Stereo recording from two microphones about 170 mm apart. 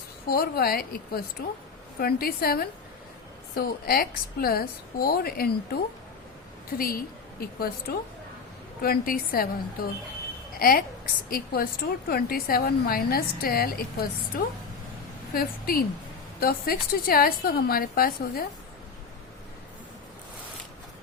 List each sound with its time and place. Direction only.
0.3 s a woman's voice: 65° left (ahead or behind)
10.6 s a woman's voice: 60° left (ahead or behind)